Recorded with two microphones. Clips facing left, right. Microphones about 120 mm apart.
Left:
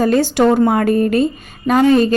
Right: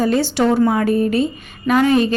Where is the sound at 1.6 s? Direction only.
35° left (ahead or behind).